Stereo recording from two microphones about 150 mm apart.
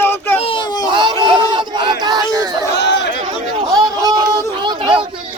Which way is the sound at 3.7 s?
25° right (ahead or behind).